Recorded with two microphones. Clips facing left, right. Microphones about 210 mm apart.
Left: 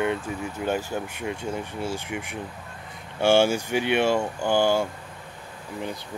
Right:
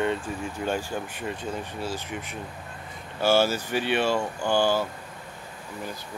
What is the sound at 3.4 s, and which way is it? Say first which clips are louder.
Speech: left 3 dB; 15° left (ahead or behind).